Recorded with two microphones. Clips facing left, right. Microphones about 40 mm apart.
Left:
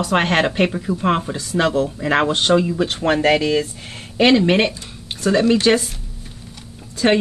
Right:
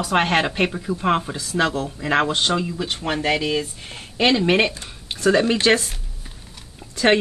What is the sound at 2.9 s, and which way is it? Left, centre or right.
Speech, left.